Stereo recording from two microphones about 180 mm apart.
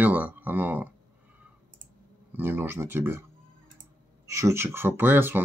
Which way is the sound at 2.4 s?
10° right (ahead or behind).